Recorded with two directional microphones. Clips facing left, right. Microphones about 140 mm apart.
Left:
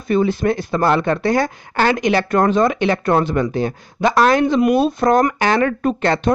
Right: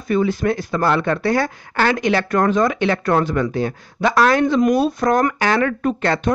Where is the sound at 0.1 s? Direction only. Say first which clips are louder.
Left 2 dB; 25° left (ahead or behind).